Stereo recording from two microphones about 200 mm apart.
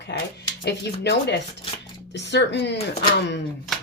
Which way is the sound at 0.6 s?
55° left (ahead or behind).